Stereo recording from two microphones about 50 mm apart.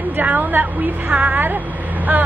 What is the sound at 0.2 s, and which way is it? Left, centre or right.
A woman's voice, right.